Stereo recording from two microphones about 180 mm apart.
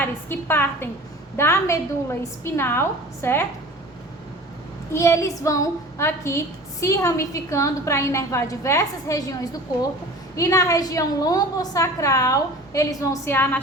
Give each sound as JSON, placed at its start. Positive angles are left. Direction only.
{"t": 0.0, "sound": "a woman's voice", "side_deg": 10}
{"t": 4.9, "sound": "a woman's voice", "side_deg": 15}